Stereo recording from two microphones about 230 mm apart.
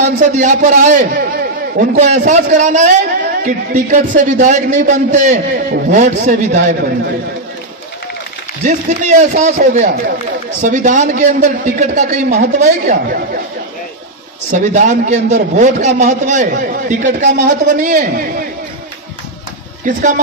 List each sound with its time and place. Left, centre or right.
0.0 s a man's voice: right
8.6 s a man's voice: right
14.5 s a man's voice: right
19.8 s a man's voice: right